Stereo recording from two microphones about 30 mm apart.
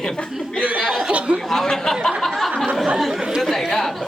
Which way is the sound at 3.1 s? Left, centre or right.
Right.